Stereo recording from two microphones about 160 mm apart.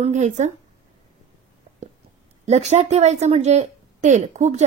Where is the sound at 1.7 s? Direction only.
40° right (ahead or behind).